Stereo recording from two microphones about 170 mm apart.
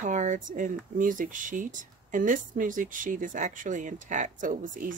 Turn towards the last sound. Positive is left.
turn(degrees=-50)  # may be behind; listen again after turning